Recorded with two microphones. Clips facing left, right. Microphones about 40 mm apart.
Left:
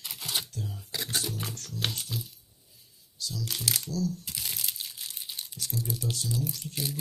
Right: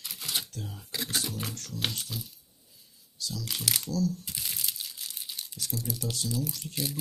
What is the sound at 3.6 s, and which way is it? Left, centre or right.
Speech, right.